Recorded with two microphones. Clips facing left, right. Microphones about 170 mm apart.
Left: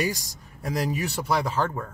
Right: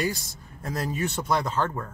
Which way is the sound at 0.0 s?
15° left (ahead or behind).